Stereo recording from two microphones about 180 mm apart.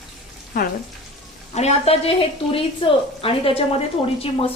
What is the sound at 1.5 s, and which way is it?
A woman's voice, 35° left (ahead or behind).